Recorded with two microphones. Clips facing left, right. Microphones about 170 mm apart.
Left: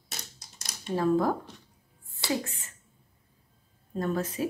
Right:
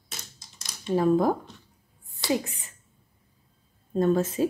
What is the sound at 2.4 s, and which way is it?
Speech, 15° right (ahead or behind).